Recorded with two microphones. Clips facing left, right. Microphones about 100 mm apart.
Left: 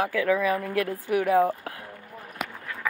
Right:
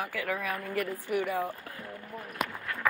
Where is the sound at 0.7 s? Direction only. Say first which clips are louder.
Left 5 dB; 90° left.